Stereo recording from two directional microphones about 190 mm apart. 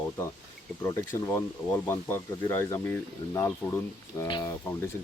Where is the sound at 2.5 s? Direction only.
10° left (ahead or behind).